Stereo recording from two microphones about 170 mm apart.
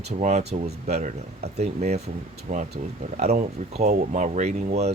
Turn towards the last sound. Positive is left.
turn(degrees=-40)  # may be behind; listen again after turning